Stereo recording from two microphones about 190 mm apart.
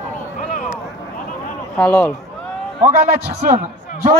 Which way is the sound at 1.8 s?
10° left (ahead or behind).